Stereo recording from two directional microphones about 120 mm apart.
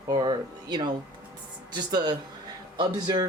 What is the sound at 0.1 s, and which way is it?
Speech, 40° right (ahead or behind).